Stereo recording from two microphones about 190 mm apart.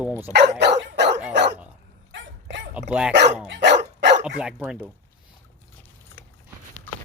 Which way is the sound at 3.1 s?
65° right (ahead or behind).